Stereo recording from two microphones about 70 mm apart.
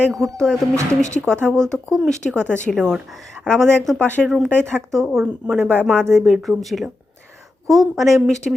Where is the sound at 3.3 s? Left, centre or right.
Centre.